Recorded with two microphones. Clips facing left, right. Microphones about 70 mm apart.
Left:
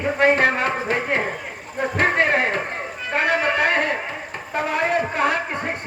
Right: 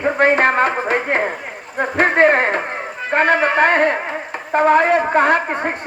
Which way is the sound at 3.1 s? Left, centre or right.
Right.